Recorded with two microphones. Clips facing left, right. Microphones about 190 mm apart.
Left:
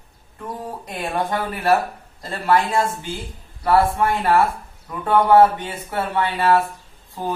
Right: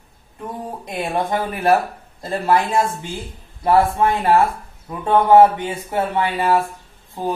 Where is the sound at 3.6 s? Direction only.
20° right (ahead or behind).